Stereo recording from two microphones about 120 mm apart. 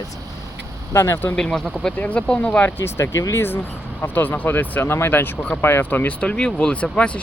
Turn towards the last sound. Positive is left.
turn(degrees=10)  # may be behind; listen again after turning